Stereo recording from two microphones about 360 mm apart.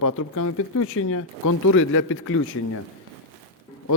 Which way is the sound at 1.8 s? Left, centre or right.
Left.